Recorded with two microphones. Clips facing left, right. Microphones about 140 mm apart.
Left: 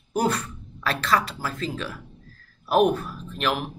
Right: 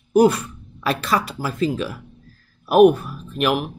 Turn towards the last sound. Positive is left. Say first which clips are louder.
# right 5 dB
turn(degrees=-10)  # may be behind; listen again after turning